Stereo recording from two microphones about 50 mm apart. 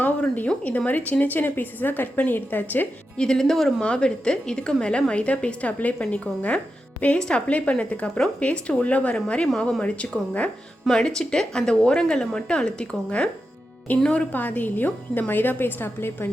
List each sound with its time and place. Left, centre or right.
0.0 s a sound: left
0.9 s a woman's voice: left
3.2 s a woman's voice: centre
3.8 s a woman's voice: centre
14.3 s a woman's voice: left